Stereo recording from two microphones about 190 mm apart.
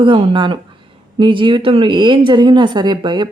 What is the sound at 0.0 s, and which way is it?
Speech, 25° right (ahead or behind).